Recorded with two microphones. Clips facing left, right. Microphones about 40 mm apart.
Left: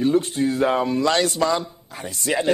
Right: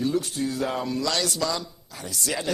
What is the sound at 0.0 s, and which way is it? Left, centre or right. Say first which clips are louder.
A man's voice: left 6 dB; left.